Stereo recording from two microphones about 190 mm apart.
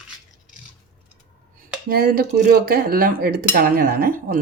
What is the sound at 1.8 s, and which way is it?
Speech, 50° right (ahead or behind).